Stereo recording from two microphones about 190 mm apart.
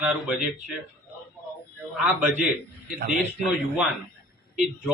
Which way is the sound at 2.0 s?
5° right (ahead or behind).